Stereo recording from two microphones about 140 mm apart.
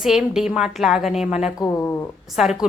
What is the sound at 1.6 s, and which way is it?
Speech, 20° left (ahead or behind).